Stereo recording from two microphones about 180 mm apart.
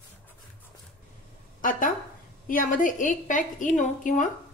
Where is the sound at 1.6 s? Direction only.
50° left (ahead or behind).